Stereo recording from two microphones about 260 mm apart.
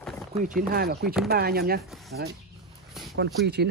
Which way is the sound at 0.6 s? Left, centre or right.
Right.